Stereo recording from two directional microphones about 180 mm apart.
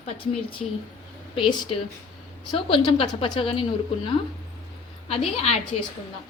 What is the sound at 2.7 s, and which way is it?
A woman's voice, 30° left (ahead or behind).